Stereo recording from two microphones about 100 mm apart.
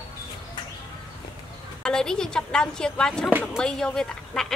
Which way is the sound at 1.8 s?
5° left (ahead or behind).